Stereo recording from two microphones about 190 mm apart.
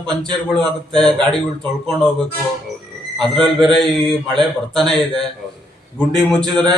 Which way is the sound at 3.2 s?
Centre (ahead or behind).